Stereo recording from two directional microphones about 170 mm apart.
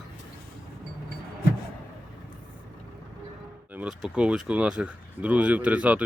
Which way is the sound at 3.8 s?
5° right (ahead or behind).